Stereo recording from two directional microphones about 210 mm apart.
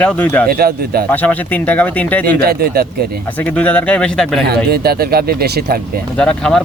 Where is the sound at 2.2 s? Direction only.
45° right (ahead or behind).